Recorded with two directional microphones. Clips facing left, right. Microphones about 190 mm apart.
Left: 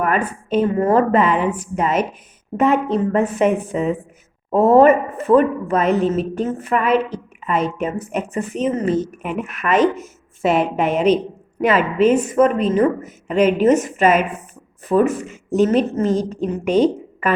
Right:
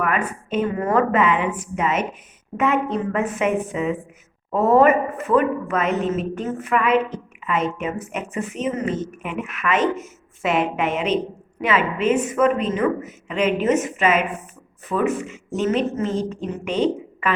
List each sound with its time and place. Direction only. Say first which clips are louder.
0.0 s speech: left 3 dB; 35° left (ahead or behind)